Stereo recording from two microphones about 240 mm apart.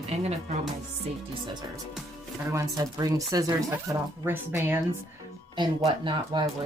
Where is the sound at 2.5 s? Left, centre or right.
Centre.